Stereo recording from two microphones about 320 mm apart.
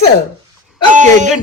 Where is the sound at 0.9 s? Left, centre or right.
Right.